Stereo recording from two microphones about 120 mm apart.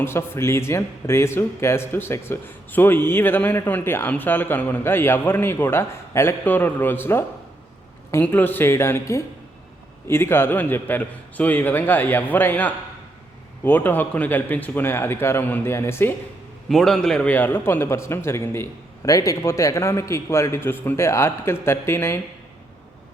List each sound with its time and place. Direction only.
0.0 s a man's voice: 20° left (ahead or behind)
16.6 s speech: 5° left (ahead or behind); by 22.2 s 20° left (ahead or behind)